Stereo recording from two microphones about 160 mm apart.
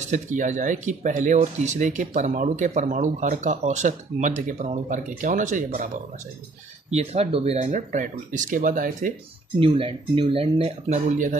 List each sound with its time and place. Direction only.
0.1 s speech: 50° right (ahead or behind)
6.9 s speech: 40° right (ahead or behind); by 9.1 s 55° right (ahead or behind)
9.6 s speech: 35° right (ahead or behind); by 11.3 s 50° right (ahead or behind)